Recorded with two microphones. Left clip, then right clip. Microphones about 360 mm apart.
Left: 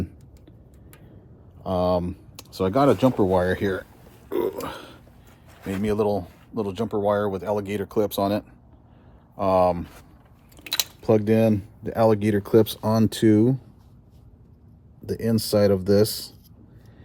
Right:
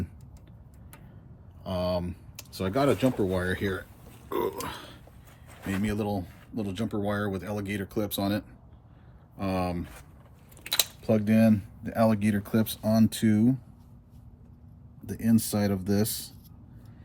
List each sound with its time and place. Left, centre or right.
1.6 s speech: left
3.3 s speech: centre
4.3 s burping: centre
5.8 s speech: centre
11.0 s speech: centre
15.0 s speech: left